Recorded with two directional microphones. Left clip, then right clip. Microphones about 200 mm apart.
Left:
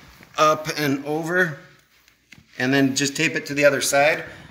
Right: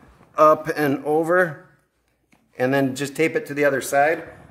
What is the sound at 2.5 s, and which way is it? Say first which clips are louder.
Speech: even; 55° right (ahead or behind).